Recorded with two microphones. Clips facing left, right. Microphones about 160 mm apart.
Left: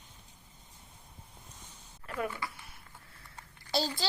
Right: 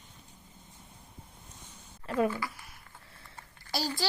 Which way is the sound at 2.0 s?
25° right (ahead or behind).